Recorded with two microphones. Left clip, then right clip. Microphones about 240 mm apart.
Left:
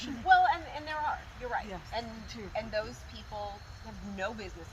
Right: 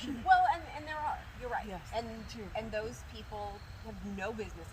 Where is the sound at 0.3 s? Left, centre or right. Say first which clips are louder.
Left 2 dB; centre.